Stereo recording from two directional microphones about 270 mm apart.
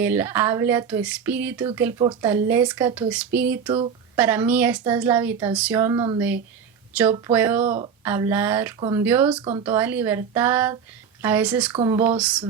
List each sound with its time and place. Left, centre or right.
0.0 s speech: centre
3.7 s speech: centre
4.2 s speech: centre
9.4 s speech: centre
9.6 s speech: centre
11.7 s speech: centre
11.9 s speech: centre